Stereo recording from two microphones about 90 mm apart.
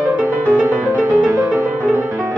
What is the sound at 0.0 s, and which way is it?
Music, 25° right (ahead or behind).